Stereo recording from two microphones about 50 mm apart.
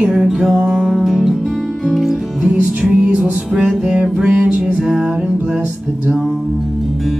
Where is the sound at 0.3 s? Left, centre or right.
Centre.